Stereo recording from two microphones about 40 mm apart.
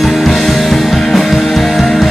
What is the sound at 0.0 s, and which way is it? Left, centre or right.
Music, centre.